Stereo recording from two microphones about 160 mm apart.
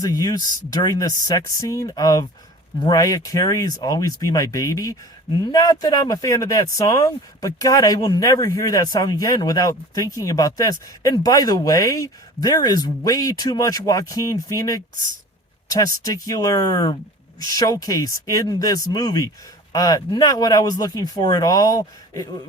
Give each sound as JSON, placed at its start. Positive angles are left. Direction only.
{"t": 0.0, "sound": "speech", "side_deg": 25}
{"t": 16.0, "sound": "speech", "side_deg": 20}